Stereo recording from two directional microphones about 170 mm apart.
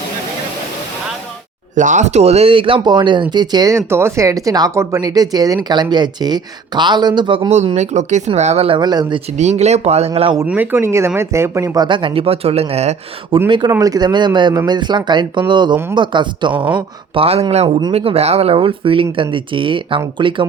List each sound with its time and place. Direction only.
1.7 s speech: 50° right (ahead or behind); by 7.5 s 30° right (ahead or behind)
7.5 s speech: 40° right (ahead or behind); by 9.2 s 25° right (ahead or behind)
9.4 s speech: 40° right (ahead or behind)
10.4 s speech: 10° right (ahead or behind); by 13.4 s 40° right (ahead or behind)
13.5 s speech: 25° right (ahead or behind)